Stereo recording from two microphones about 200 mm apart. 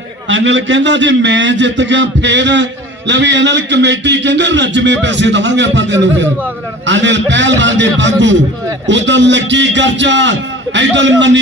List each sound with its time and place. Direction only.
0.3 s a man's voice: 65° right (ahead or behind)